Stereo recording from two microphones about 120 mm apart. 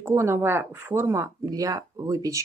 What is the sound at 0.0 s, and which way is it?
Speech, 20° right (ahead or behind).